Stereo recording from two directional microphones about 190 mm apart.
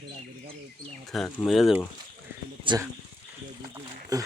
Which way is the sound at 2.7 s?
25° right (ahead or behind).